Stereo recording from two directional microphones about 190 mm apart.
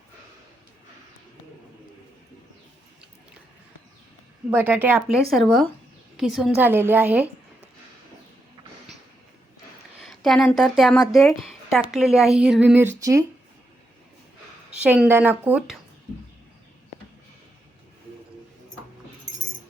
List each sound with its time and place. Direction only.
4.4 s a woman's voice: 10° right (ahead or behind)
10.0 s a woman's voice: centre (ahead or behind); by 13.2 s 15° right (ahead or behind)
14.8 s a woman's voice: 10° right (ahead or behind)